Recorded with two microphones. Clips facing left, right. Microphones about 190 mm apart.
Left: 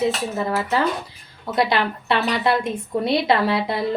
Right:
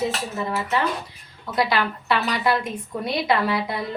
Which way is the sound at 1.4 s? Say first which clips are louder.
Left 2 dB; 25° left (ahead or behind).